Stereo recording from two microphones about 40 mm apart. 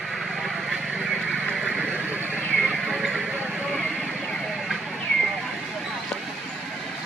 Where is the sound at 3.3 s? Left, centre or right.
Centre.